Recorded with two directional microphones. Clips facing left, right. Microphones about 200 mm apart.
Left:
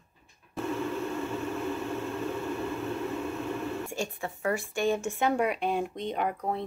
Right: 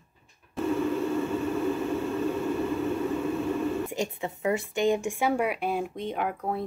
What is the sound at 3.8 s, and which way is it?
Speech, 20° right (ahead or behind).